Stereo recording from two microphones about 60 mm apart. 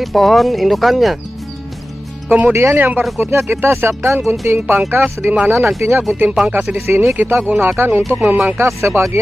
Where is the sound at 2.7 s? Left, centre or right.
Right.